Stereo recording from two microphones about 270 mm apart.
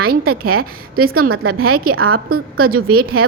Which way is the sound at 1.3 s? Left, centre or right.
Right.